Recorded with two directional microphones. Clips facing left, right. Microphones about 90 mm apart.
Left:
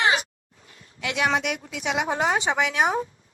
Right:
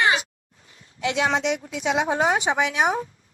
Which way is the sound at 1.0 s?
20° right (ahead or behind).